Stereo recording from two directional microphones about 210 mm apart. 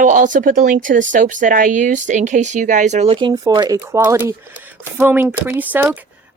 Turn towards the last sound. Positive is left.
turn(degrees=-10)  # may be behind; listen again after turning